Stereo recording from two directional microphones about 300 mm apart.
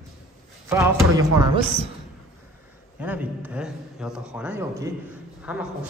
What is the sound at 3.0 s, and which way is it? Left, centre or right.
A man's voice, centre.